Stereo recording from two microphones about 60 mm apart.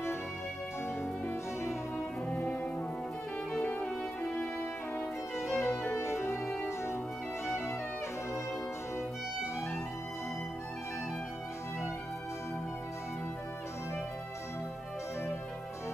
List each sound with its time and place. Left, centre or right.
1.2 s music: left
2.2 s music: left
5.5 s music: left
7.4 s music: left